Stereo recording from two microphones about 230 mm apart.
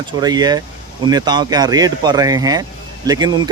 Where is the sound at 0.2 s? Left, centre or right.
Centre.